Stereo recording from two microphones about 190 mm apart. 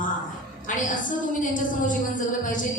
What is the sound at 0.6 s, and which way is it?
A woman's voice, 40° left (ahead or behind).